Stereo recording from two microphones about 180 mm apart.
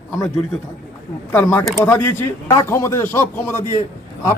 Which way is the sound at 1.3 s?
10° left (ahead or behind).